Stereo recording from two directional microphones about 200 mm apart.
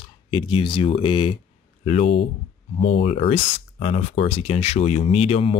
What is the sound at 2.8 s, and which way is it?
Speech, 30° left (ahead or behind).